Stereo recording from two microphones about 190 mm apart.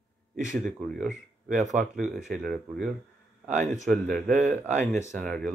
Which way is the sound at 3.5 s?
40° right (ahead or behind).